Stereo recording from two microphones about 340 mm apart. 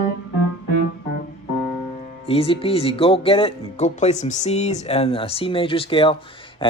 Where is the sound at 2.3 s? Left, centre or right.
Centre.